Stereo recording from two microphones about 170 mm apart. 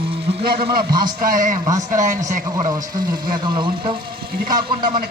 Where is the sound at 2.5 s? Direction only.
20° right (ahead or behind).